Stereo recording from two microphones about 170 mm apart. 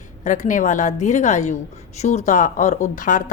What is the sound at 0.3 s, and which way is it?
Speech, 50° left (ahead or behind).